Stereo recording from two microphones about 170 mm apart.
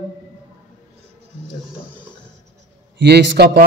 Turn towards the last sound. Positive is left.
turn(degrees=-80)